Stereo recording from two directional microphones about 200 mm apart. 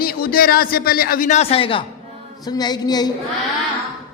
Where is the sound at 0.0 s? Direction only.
50° left (ahead or behind); by 3.1 s 20° left (ahead or behind).